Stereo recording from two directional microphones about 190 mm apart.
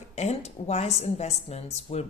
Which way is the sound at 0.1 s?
35° left (ahead or behind).